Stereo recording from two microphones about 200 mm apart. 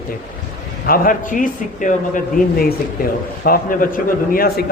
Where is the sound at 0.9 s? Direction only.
45° left (ahead or behind).